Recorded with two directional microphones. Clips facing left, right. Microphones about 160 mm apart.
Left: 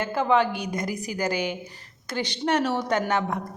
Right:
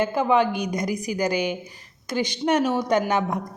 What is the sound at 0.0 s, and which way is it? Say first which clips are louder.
Speech: right 2 dB; 15° right (ahead or behind).